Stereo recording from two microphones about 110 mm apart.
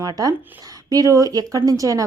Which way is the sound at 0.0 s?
35° right (ahead or behind).